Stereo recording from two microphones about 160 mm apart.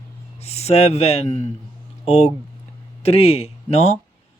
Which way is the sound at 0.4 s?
40° left (ahead or behind).